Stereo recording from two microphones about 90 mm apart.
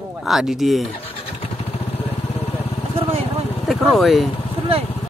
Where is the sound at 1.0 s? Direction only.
90° left.